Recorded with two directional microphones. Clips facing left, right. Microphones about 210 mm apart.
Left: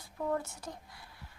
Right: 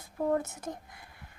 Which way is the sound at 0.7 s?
50° right (ahead or behind).